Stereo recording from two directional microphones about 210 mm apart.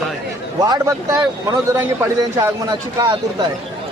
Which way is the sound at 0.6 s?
20° right (ahead or behind).